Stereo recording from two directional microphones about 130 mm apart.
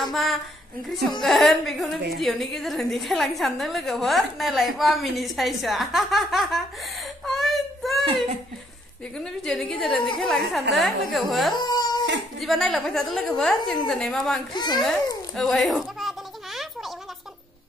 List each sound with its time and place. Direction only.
0.1 s a woman's voice: centre (ahead or behind)
7.2 s whimper: centre (ahead or behind)
8.0 s speech: 45° right (ahead or behind)
9.2 s a woman's voice: 5° left (ahead or behind)
11.5 s a sound: 35° left (ahead or behind)
12.4 s a woman's voice: centre (ahead or behind)
14.5 s a child's voice: 35° left (ahead or behind)
15.3 s a sound: centre (ahead or behind)